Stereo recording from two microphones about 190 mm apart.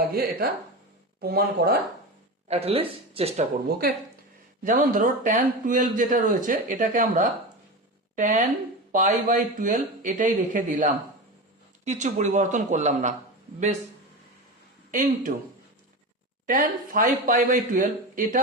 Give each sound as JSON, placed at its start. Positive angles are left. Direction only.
{"t": 0.1, "sound": "a man's voice", "side_deg": -50}
{"t": 2.5, "sound": "speech", "side_deg": -30}
{"t": 3.7, "sound": "a man's voice", "side_deg": -55}
{"t": 14.8, "sound": "speech", "side_deg": -45}
{"t": 16.5, "sound": "a man's voice", "side_deg": -45}